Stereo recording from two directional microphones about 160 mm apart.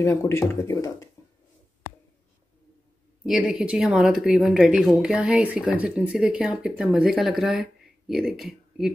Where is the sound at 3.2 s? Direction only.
5° right (ahead or behind).